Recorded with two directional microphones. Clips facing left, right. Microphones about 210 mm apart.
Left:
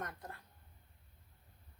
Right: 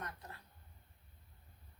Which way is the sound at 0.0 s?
50° left (ahead or behind).